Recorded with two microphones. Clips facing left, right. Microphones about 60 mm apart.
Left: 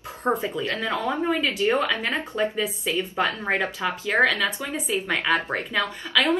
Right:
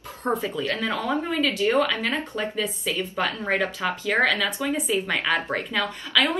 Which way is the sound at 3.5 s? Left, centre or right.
Left.